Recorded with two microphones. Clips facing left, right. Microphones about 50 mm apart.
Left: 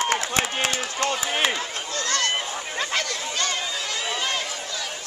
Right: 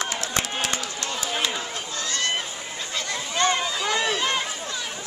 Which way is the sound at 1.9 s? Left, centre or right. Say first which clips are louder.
Left 3 dB; left.